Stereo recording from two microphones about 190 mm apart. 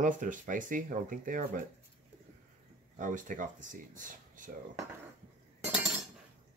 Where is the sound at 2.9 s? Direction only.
45° right (ahead or behind).